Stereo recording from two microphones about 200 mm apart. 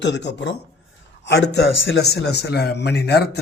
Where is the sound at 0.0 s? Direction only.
60° left (ahead or behind).